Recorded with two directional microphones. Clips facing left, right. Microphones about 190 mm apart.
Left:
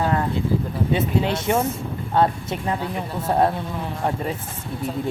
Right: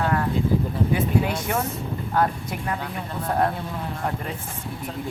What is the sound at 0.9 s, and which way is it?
Speech, 25° left (ahead or behind).